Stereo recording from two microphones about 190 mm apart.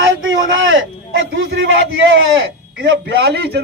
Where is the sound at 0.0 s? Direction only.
90° right; by 2.2 s 75° right (ahead or behind).